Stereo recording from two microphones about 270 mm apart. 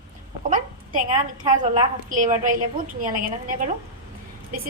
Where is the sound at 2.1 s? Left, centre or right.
Right.